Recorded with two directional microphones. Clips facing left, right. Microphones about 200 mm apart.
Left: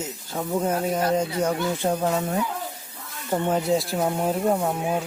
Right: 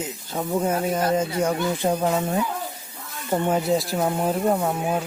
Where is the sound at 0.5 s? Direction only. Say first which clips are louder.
Right 1 dB; 5° right (ahead or behind).